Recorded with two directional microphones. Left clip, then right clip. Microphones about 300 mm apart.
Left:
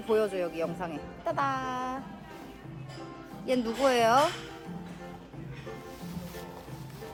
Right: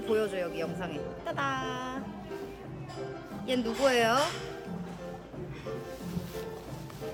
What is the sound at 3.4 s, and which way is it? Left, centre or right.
Speech, centre.